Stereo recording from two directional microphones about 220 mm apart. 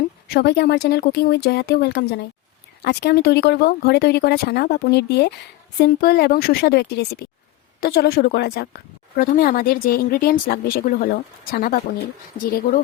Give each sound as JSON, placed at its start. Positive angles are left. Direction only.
{"t": 0.3, "sound": "a woman's voice", "side_deg": 45}